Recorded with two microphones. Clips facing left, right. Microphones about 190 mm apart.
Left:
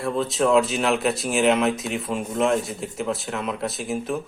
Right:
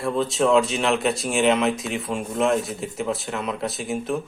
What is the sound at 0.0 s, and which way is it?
Speech, centre (ahead or behind).